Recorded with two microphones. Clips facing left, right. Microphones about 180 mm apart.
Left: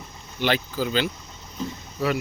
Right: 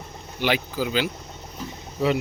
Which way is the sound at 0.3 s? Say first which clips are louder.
Even; 10° right (ahead or behind).